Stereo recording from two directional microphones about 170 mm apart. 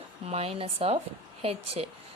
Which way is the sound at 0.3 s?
35° right (ahead or behind).